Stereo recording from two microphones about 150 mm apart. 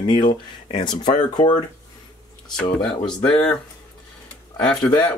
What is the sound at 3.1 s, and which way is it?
Speech, 5° left (ahead or behind).